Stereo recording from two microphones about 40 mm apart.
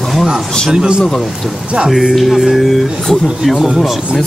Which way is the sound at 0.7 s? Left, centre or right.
Right.